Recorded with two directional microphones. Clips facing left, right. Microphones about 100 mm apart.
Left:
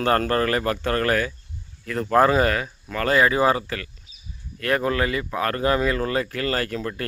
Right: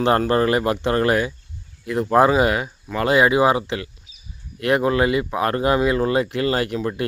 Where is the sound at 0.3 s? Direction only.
15° right (ahead or behind).